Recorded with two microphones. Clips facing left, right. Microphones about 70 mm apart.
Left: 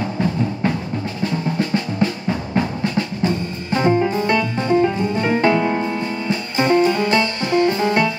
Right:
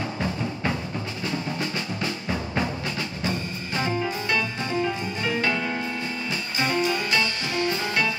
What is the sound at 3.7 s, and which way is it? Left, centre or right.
Music, left.